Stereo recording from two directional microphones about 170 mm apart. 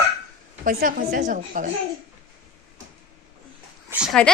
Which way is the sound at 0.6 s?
60° right (ahead or behind).